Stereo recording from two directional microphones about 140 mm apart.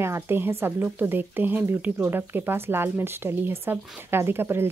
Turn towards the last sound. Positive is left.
turn(degrees=-15)  # may be behind; listen again after turning